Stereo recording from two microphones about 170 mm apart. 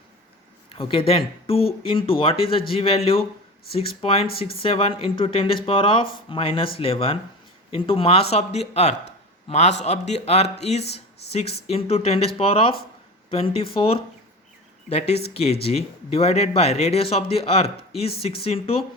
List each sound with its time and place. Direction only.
0.7 s speech: 30° left (ahead or behind)